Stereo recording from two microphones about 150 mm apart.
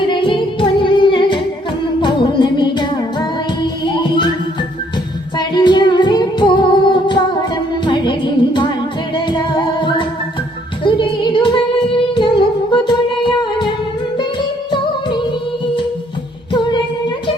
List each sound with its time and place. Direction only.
0.1 s music: 35° left (ahead or behind)
5.4 s music: 30° left (ahead or behind)
10.8 s child singing: 35° left (ahead or behind)
12.7 s music: 30° left (ahead or behind)
16.5 s female singing: 30° left (ahead or behind)